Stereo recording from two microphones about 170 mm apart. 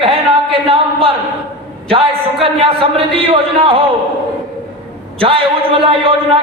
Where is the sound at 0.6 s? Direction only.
35° right (ahead or behind).